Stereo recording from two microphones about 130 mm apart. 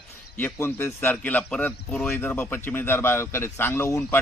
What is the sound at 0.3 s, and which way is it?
A man's voice, 15° left (ahead or behind).